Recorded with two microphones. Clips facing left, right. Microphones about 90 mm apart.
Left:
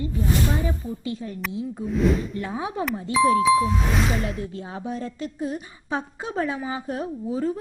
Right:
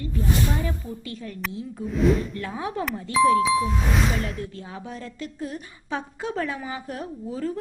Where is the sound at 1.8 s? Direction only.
Centre (ahead or behind).